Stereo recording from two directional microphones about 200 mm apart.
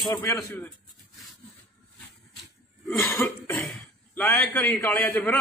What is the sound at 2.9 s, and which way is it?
Cough, 10° left (ahead or behind).